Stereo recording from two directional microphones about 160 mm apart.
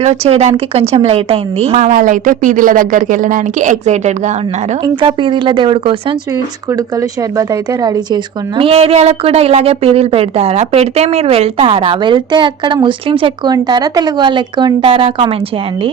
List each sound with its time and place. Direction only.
0.0 s a woman's voice: 45° right (ahead or behind)
1.9 s speech: 55° right (ahead or behind)
4.8 s a woman's voice: 30° right (ahead or behind)
6.7 s a woman's voice: 20° right (ahead or behind)